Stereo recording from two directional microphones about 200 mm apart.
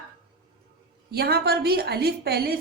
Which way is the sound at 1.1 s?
55° right (ahead or behind).